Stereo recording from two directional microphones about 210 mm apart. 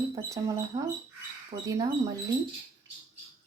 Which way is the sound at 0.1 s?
15° right (ahead or behind).